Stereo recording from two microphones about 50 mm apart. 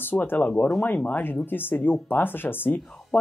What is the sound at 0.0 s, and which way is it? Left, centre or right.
Speech, left.